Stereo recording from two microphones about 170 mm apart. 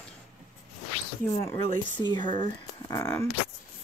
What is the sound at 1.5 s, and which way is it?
Speech, 25° left (ahead or behind).